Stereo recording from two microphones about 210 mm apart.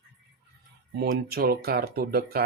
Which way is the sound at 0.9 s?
45° right (ahead or behind).